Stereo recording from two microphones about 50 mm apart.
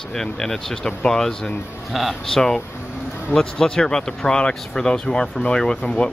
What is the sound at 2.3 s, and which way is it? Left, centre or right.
Speech, centre.